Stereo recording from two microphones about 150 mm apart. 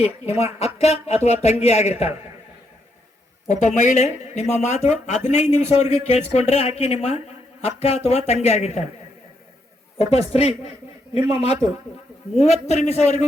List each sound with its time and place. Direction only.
0.3 s a man's voice: 45° left (ahead or behind)
3.5 s a man's voice: 50° left (ahead or behind)
10.0 s a man's voice: 45° left (ahead or behind)